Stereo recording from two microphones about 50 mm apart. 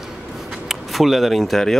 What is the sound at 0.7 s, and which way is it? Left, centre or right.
Speech, centre.